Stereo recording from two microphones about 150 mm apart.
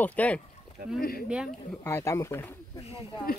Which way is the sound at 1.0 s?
80° left.